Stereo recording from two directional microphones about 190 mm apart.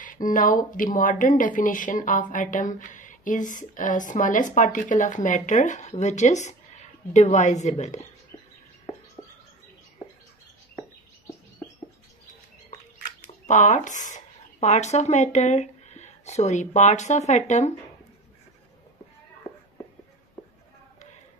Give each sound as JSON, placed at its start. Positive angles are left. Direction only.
{"t": 0.0, "sound": "a woman's voice", "side_deg": 45}
{"t": 13.5, "sound": "speech", "side_deg": 40}